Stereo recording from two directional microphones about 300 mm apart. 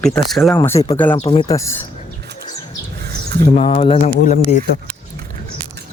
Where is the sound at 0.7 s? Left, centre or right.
Left.